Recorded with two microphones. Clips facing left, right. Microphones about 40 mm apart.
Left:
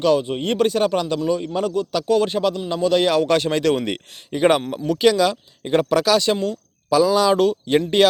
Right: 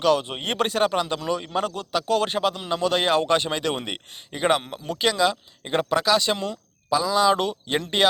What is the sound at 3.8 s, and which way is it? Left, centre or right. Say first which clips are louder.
Speech: left 7 dB; centre.